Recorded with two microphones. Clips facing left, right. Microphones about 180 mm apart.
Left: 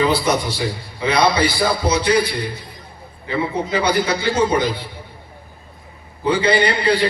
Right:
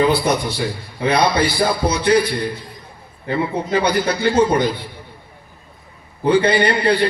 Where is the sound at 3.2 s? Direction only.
55° right (ahead or behind).